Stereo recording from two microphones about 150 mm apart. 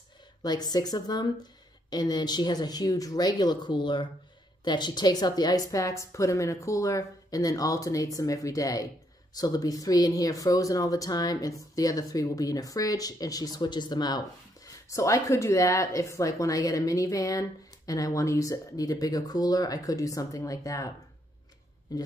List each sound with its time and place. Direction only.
0.4 s a woman's voice: 25° left (ahead or behind)